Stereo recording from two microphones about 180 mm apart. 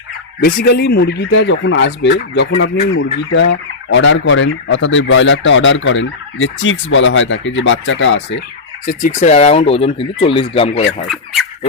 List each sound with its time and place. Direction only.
0.4 s speech: 60° left (ahead or behind); by 8.4 s 90° left
8.9 s speech: 50° left (ahead or behind); by 10.8 s 30° left (ahead or behind)